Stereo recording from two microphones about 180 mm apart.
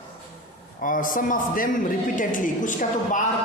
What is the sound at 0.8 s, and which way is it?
A woman's voice, 50° left (ahead or behind).